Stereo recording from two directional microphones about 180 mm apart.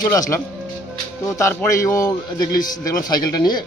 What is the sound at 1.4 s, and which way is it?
Speech, 15° left (ahead or behind).